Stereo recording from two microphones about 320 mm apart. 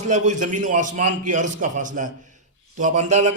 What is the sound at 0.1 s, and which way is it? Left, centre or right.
A man's voice, right.